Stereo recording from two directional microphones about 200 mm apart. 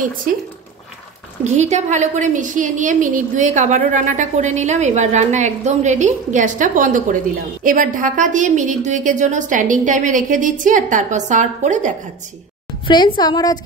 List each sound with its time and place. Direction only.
1.4 s a woman's voice: 35° right (ahead or behind)
12.8 s a woman's voice: 25° left (ahead or behind)